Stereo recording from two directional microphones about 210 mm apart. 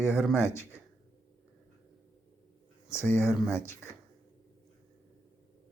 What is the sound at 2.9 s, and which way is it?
Speech, 10° left (ahead or behind).